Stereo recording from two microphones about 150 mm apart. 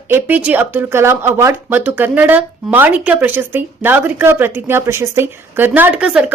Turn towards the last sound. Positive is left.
turn(degrees=-5)  # may be behind; listen again after turning